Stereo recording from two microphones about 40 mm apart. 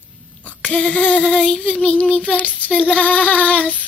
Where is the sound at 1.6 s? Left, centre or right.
Left.